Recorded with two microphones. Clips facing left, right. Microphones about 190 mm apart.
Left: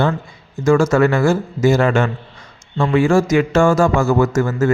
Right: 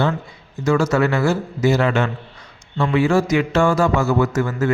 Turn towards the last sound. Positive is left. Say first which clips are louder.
# left 3 dB
turn(degrees=45)  # may be behind; listen again after turning